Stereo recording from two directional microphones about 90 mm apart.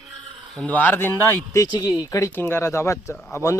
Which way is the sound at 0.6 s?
20° left (ahead or behind).